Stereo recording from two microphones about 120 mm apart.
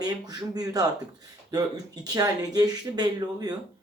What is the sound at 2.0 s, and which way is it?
Speech, 30° right (ahead or behind).